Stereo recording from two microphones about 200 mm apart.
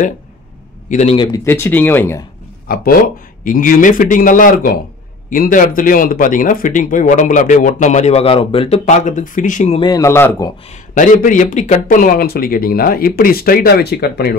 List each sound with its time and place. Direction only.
0.8 s a man's voice: 35° left (ahead or behind)
1.1 s speech: 25° left (ahead or behind)
1.4 s speech: 10° left (ahead or behind)
2.7 s speech: 45° left (ahead or behind)
9.8 s speech: 20° left (ahead or behind)
10.7 s speech: 40° left (ahead or behind)